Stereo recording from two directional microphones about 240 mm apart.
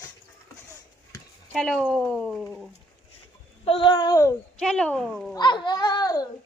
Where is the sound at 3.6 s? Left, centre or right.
Left; by 5.3 s centre.